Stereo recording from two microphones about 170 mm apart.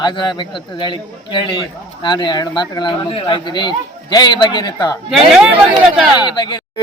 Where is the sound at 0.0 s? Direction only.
25° left (ahead or behind).